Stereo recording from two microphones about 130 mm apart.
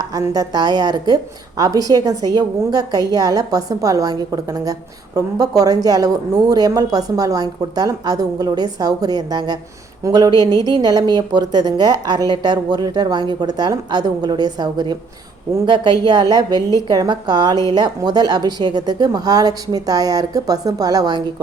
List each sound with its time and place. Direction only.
0.0 s a woman's voice: 25° right (ahead or behind)